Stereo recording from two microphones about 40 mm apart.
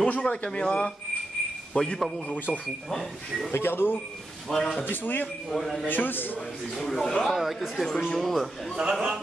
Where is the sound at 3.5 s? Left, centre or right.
Left.